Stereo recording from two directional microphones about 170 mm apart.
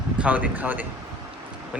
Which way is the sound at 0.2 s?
10° right (ahead or behind).